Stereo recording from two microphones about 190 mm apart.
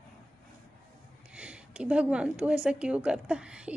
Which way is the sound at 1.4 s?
5° right (ahead or behind).